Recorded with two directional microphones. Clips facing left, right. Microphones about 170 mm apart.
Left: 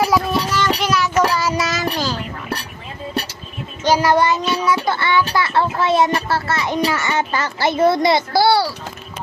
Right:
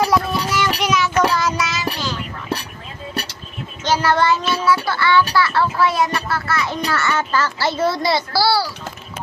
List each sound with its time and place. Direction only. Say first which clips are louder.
0.0 s child singing: left 1 dB; centre (ahead or behind)
1.6 s child singing: left 3 dB; 45° left (ahead or behind)
3.8 s speech: left 2 dB; 15° left (ahead or behind)
6.8 s a child's voice: left 1 dB; 15° left (ahead or behind)